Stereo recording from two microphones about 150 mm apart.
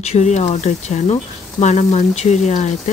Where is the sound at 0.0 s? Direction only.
45° left (ahead or behind).